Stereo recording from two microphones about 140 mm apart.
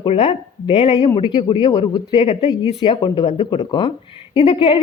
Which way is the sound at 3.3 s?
45° left (ahead or behind).